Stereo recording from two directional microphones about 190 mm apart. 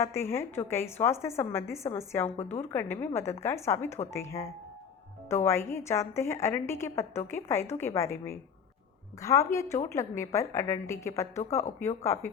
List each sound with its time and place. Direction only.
0.0 s a woman's voice: 15° left (ahead or behind)